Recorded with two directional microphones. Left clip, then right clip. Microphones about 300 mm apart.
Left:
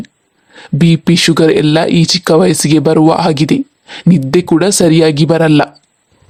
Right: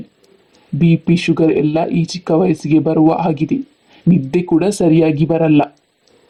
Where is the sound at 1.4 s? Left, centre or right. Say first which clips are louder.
Left 4 dB; left.